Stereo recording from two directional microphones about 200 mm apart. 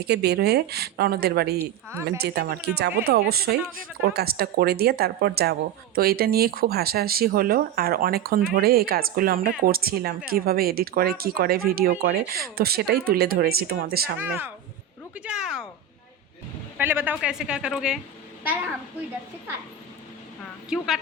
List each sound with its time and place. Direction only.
0.0 s speech: 55° right (ahead or behind)
1.5 s speech: 15° right (ahead or behind)
2.2 s speech: 55° right (ahead or behind)
14.2 s speech: 10° right (ahead or behind)
16.7 s a woman's voice: 10° right (ahead or behind)
20.7 s a woman's voice: centre (ahead or behind)